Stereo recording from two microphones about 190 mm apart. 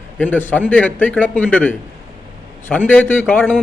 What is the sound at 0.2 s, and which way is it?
A man's voice, 10° left (ahead or behind).